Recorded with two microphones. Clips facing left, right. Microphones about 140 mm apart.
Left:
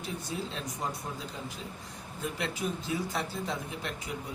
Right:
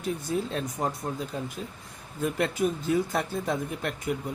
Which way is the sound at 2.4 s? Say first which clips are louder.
Right 8 dB; 50° right (ahead or behind).